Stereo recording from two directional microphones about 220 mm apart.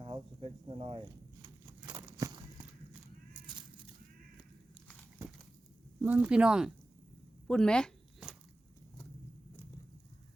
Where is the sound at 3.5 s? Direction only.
20° right (ahead or behind).